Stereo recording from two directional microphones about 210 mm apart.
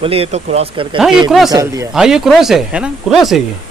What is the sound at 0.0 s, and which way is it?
Speech, 30° right (ahead or behind).